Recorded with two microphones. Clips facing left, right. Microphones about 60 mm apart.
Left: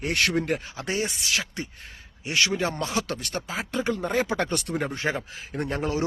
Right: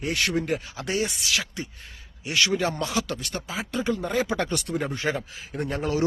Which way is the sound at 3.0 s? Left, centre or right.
Left.